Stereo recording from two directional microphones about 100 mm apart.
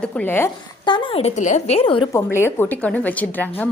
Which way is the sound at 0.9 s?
55° left (ahead or behind).